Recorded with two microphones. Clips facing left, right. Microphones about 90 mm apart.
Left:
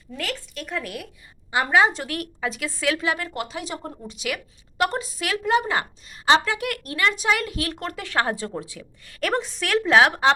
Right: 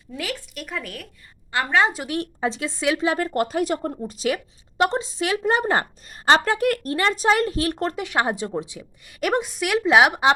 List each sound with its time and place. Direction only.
0.2 s a woman's voice: 5° right (ahead or behind)
2.0 s a woman's voice: 25° right (ahead or behind)
3.2 s speech: 40° right (ahead or behind)
4.0 s a woman's voice: 35° right (ahead or behind)
4.8 s a woman's voice: 25° right (ahead or behind)
5.5 s a woman's voice: 40° right (ahead or behind)
7.9 s a woman's voice: 15° right (ahead or behind)